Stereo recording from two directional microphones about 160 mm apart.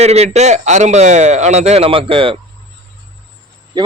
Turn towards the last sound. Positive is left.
turn(degrees=-25)  # may be behind; listen again after turning